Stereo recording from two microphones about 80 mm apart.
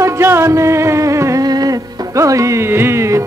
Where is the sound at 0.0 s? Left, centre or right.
Right.